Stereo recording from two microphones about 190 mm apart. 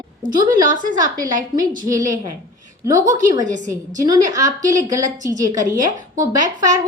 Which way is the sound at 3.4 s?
40° right (ahead or behind).